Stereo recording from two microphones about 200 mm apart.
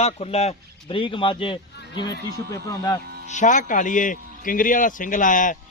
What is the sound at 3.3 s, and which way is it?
A man's voice, 40° left (ahead or behind).